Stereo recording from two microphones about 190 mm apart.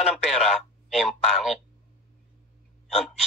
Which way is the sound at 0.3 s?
Centre (ahead or behind).